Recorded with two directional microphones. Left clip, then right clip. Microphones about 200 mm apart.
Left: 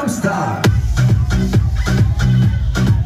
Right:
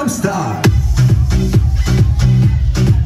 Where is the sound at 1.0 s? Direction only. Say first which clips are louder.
Right 1 dB; 15° right (ahead or behind).